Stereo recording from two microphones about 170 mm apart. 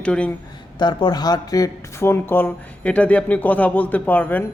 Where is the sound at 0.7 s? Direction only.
25° left (ahead or behind).